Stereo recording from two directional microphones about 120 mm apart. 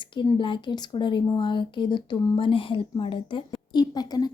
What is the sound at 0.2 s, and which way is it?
Speech, 45° left (ahead or behind).